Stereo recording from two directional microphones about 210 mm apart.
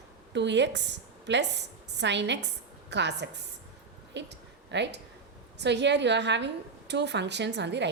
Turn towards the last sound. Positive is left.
turn(degrees=-55)  # may be behind; listen again after turning